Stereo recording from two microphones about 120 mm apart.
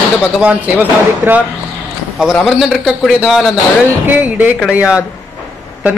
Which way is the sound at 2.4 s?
Centre (ahead or behind).